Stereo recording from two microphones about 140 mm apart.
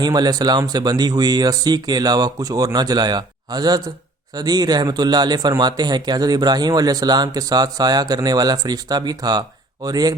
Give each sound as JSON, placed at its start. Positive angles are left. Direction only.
{"t": 0.0, "sound": "speech", "side_deg": -30}